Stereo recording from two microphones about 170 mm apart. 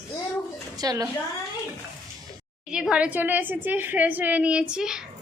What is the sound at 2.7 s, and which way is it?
A woman's voice, 5° right (ahead or behind).